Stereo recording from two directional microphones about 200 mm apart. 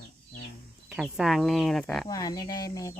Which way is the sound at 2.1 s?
20° left (ahead or behind).